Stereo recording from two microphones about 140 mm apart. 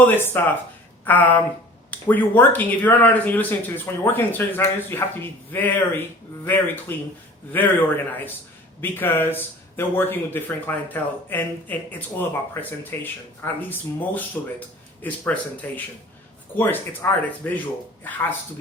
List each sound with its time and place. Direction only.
0.0 s speech: 15° left (ahead or behind)